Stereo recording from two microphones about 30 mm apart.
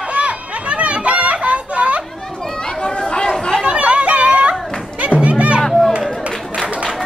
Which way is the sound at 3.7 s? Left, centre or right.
Right.